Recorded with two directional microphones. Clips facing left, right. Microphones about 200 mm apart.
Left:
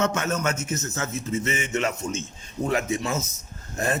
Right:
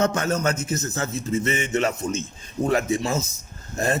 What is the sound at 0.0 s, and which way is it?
A man's voice, 35° right (ahead or behind).